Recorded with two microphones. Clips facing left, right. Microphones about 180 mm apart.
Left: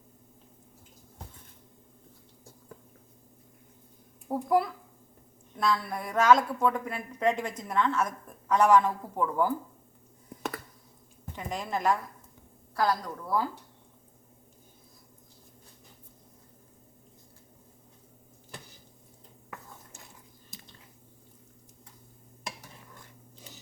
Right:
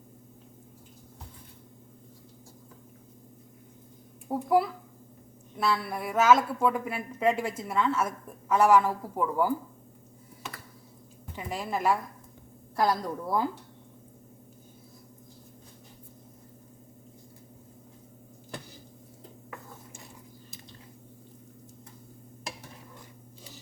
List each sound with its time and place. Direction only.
4.3 s a woman's voice: centre (ahead or behind)
11.3 s a woman's voice: 5° right (ahead or behind)
12.7 s a woman's voice: 20° right (ahead or behind)